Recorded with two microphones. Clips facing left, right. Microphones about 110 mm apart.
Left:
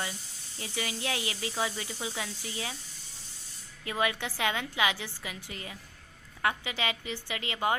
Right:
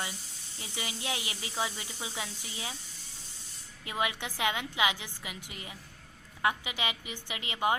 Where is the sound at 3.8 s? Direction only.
20° right (ahead or behind).